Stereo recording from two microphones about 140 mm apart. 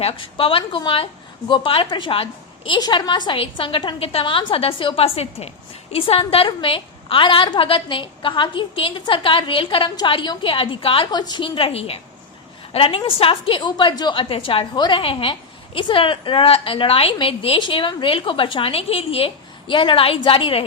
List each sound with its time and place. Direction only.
0.0 s a woman's voice: 40° left (ahead or behind)